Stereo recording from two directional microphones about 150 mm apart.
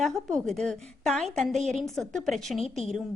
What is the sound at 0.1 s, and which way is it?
Speech, 20° right (ahead or behind).